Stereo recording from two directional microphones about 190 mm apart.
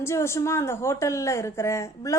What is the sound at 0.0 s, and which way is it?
A woman's voice, 15° left (ahead or behind).